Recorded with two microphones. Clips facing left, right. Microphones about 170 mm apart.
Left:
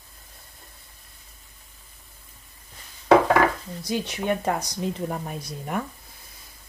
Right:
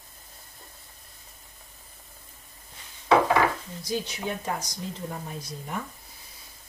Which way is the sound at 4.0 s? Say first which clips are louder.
Left 7 dB; 60° left (ahead or behind).